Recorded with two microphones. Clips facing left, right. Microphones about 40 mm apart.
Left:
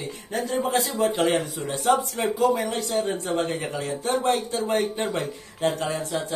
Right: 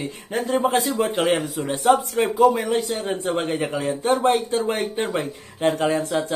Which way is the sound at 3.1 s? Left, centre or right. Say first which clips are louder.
Right 3 dB; right.